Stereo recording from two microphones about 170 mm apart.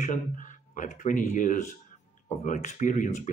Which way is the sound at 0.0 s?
50° left (ahead or behind).